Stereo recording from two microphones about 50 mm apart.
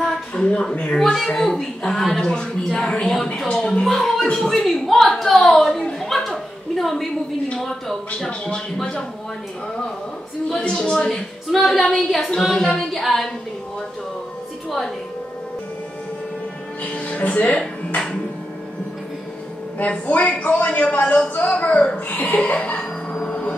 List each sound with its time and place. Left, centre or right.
0.3 s speech: centre
3.8 s speech: centre
5.7 s a sound: centre
7.5 s speech: centre
8.3 s speech: centre
10.6 s speech: centre
11.5 s speech: centre
12.3 s speech: centre
16.8 s speech: left
19.9 s speech: left